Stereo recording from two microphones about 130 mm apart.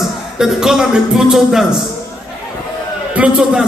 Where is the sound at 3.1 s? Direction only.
10° right (ahead or behind).